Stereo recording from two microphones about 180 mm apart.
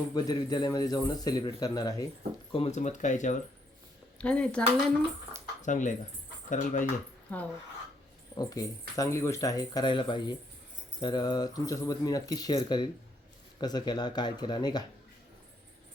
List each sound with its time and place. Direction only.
0.1 s speech: 20° left (ahead or behind)
2.5 s speech: 35° left (ahead or behind)
4.2 s speech: 5° left (ahead or behind)
5.6 s speech: 45° left (ahead or behind)
7.3 s speech: 10° left (ahead or behind)
8.4 s speech: 20° left (ahead or behind)